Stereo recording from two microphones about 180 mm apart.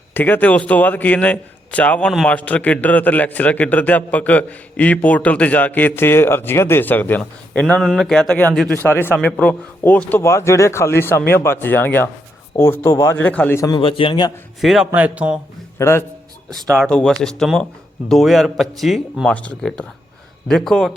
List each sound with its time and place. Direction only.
0.1 s speech: 10° left (ahead or behind)
13.7 s a man's voice: 30° left (ahead or behind)
14.6 s speech: centre (ahead or behind)
15.8 s speech: 15° left (ahead or behind)
16.8 s speech: 5° left (ahead or behind)